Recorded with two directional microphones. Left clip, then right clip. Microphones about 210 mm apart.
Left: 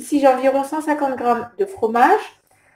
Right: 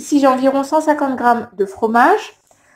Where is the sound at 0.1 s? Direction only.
30° right (ahead or behind).